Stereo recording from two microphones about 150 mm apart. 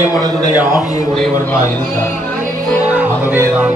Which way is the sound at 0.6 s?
Centre (ahead or behind).